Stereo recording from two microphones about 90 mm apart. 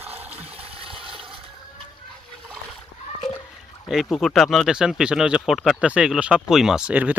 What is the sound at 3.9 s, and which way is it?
Speech, centre (ahead or behind).